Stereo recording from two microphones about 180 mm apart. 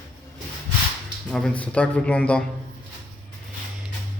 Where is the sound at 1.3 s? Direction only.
5° left (ahead or behind).